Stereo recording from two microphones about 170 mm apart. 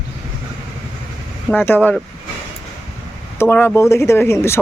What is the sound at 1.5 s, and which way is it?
Speech, 10° left (ahead or behind).